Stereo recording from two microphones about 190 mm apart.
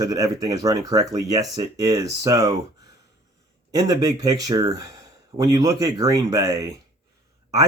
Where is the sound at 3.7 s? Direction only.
20° right (ahead or behind).